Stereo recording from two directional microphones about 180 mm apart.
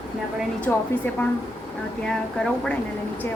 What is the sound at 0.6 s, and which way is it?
A woman's voice, 10° left (ahead or behind).